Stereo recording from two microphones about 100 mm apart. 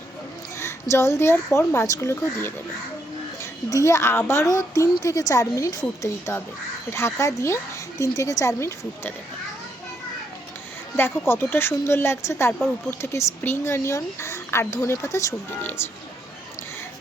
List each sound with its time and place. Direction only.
0.6 s a woman's voice: 30° left (ahead or behind)
3.7 s a woman's voice: 30° left (ahead or behind)
6.9 s a woman's voice: 30° left (ahead or behind)
10.9 s speech: 25° left (ahead or behind)